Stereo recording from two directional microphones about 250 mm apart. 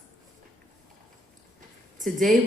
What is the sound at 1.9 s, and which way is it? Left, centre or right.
Speech, right.